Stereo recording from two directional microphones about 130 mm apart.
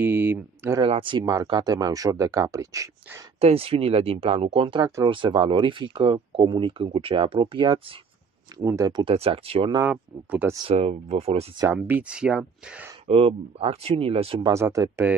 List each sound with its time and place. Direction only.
0.0 s a sound: 15° right (ahead or behind)
0.8 s speech: 40° right (ahead or behind)
1.2 s speech: 30° right (ahead or behind)
3.3 s speech: 50° right (ahead or behind)
4.8 s speech: 25° right (ahead or behind)
5.1 s speech: 40° right (ahead or behind)
8.5 s speech: 25° right (ahead or behind)
9.1 s speech: 50° right (ahead or behind)
9.8 s speech: 10° right (ahead or behind)
10.7 s speech: 55° right (ahead or behind)
11.7 s speech: 10° right (ahead or behind)
13.0 s speech: 50° right (ahead or behind)
14.5 s speech: 25° right (ahead or behind)